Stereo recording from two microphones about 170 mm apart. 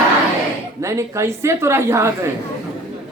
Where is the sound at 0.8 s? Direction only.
15° right (ahead or behind).